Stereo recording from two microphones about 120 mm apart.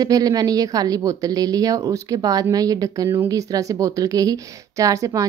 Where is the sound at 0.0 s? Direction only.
30° right (ahead or behind).